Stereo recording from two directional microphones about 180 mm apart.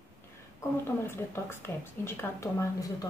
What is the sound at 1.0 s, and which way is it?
A woman's voice, 15° left (ahead or behind).